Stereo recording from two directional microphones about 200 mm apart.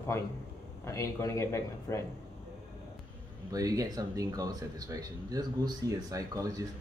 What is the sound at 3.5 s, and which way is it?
Speech, 15° right (ahead or behind).